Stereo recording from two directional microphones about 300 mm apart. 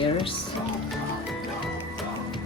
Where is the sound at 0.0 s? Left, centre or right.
Centre.